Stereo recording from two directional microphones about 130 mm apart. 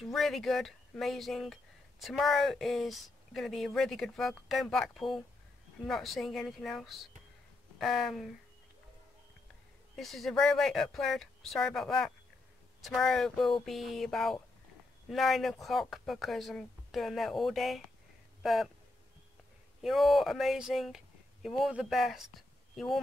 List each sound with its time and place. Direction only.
0.0 s speech: centre (ahead or behind)
9.9 s speech: centre (ahead or behind)
19.8 s speech: centre (ahead or behind)